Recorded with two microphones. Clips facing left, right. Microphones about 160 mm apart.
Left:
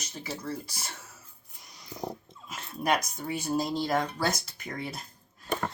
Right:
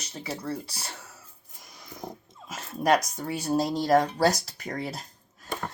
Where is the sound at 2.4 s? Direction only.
45° right (ahead or behind).